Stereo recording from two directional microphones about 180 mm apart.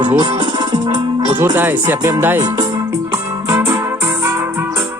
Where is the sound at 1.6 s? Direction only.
10° right (ahead or behind).